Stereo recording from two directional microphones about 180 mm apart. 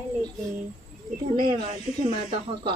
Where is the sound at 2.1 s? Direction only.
30° right (ahead or behind).